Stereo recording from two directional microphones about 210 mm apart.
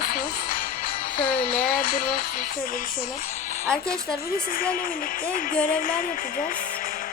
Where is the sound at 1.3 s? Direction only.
40° left (ahead or behind).